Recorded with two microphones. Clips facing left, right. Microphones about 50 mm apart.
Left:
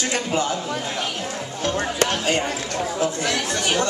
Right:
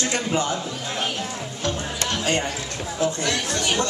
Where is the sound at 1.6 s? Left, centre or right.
Left.